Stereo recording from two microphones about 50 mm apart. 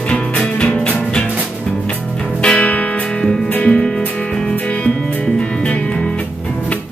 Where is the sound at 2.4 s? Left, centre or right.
Left.